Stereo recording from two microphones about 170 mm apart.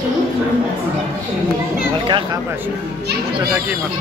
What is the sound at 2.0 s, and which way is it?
Speech, 30° right (ahead or behind).